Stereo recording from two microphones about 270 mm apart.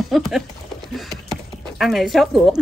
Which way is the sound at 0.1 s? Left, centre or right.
Centre.